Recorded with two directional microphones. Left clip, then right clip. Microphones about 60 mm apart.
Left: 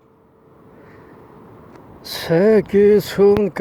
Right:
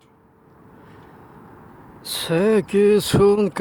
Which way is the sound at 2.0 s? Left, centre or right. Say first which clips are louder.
Left 4 dB; left.